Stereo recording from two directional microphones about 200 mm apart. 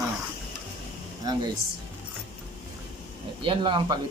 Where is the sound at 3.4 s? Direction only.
25° right (ahead or behind).